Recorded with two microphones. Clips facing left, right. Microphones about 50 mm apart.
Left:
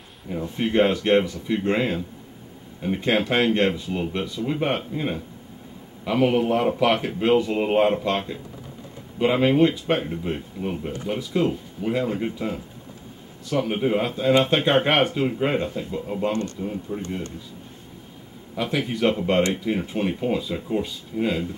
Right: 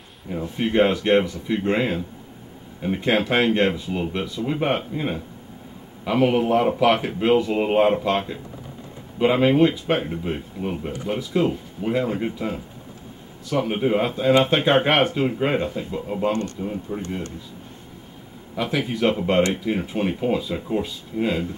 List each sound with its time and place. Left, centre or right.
0.3 s speech: centre
16.3 s a man's voice: right
16.5 s speech: centre
18.6 s speech: centre